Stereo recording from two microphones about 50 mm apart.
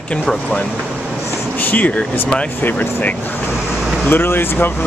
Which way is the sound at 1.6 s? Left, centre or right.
Left.